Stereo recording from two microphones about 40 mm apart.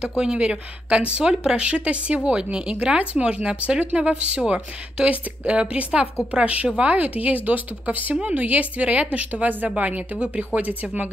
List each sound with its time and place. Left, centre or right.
0.1 s speech: centre
0.4 s speech: right